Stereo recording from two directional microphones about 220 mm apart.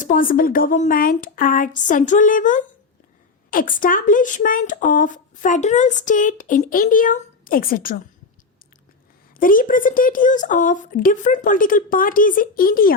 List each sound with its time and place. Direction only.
0.0 s speech: 40° left (ahead or behind)
9.4 s speech: 40° left (ahead or behind)